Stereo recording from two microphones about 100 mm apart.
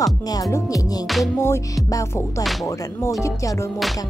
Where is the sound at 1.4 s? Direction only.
30° left (ahead or behind).